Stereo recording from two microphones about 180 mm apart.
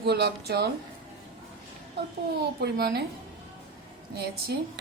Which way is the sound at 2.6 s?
65° right (ahead or behind).